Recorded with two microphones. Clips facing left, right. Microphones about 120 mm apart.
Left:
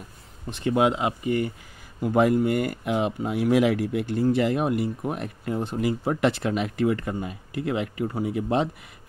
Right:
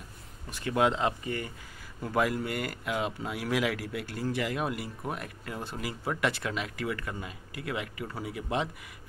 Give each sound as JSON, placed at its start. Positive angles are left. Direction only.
{"t": 0.5, "sound": "speech", "side_deg": 25}
{"t": 2.1, "sound": "speech", "side_deg": 25}